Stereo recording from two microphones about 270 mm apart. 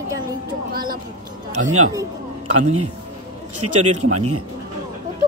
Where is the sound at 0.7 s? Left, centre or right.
Right.